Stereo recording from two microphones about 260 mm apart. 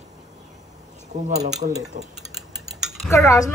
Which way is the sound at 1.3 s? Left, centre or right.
Right.